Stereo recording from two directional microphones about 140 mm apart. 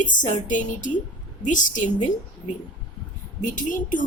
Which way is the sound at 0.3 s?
60° left (ahead or behind).